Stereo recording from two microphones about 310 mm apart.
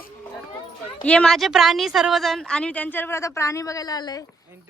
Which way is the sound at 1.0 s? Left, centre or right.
Centre.